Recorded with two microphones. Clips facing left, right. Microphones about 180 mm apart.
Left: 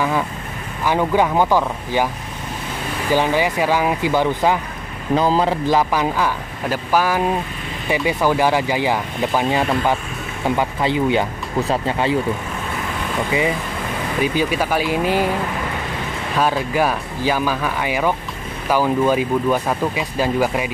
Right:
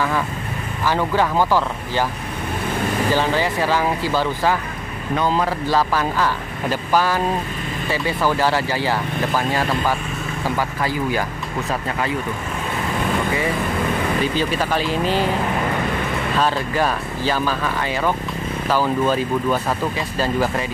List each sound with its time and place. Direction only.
0.8 s speech: 15° left (ahead or behind)
3.1 s speech: 15° left (ahead or behind)
5.1 s speech: 30° left (ahead or behind)
14.2 s speech: 10° left (ahead or behind)
16.3 s speech: 10° left (ahead or behind)